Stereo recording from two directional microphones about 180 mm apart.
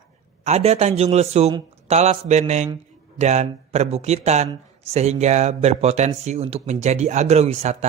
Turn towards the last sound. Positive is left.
turn(degrees=-35)  # may be behind; listen again after turning